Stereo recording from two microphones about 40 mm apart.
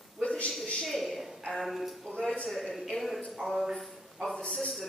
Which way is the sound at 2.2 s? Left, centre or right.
Centre.